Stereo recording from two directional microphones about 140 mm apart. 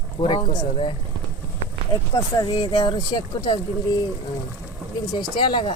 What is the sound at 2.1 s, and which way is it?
Speech, 30° left (ahead or behind).